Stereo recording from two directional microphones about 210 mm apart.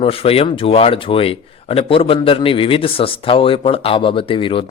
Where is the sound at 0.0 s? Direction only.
25° left (ahead or behind).